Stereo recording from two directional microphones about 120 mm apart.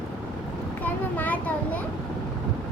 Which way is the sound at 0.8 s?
15° left (ahead or behind).